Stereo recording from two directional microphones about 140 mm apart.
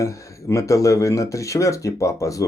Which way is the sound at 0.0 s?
20° left (ahead or behind).